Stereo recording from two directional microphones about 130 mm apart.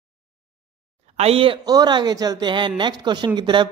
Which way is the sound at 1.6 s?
30° right (ahead or behind).